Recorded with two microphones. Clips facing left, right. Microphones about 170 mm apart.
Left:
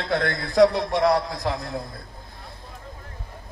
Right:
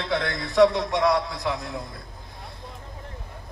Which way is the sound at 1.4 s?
35° left (ahead or behind).